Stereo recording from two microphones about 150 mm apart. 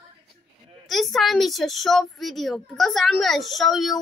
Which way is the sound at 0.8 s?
Centre (ahead or behind).